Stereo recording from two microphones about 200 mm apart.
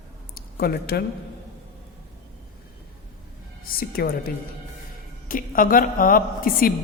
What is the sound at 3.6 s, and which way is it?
Speech, 45° left (ahead or behind).